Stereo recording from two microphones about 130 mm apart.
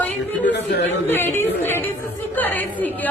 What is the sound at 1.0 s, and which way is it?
Speech, 15° left (ahead or behind).